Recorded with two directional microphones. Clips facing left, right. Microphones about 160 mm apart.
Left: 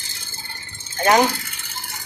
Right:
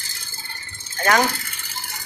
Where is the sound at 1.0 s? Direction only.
20° left (ahead or behind).